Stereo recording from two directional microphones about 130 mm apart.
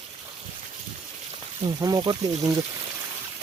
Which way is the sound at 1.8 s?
35° right (ahead or behind).